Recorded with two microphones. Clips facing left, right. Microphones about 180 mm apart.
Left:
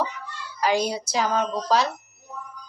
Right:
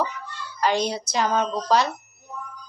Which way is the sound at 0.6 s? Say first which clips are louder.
Even; 5° left (ahead or behind).